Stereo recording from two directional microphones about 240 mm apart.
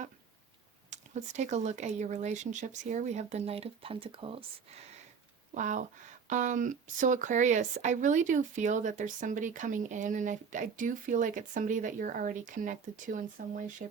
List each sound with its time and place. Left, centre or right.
0.9 s speech: right